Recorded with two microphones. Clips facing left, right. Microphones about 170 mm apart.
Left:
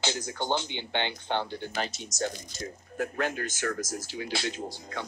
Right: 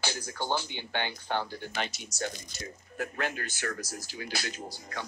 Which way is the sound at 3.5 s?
45° left (ahead or behind).